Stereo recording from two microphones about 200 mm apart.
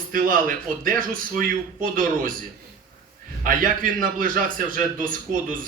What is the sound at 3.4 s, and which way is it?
A man's voice, 40° right (ahead or behind).